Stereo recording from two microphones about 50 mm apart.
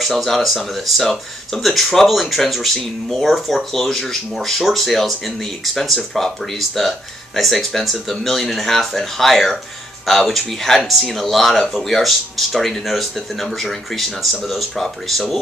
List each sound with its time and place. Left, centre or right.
0.0 s speech: centre